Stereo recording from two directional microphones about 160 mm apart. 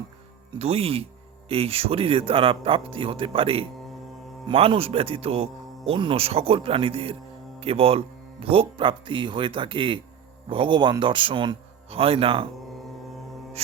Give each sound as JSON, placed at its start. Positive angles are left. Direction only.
{"t": 0.6, "sound": "speech", "side_deg": -40}